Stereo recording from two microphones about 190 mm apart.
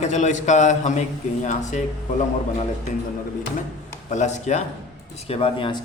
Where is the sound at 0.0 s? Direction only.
40° left (ahead or behind).